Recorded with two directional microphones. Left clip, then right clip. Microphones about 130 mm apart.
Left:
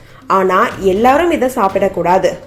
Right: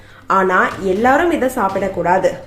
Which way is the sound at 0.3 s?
15° left (ahead or behind).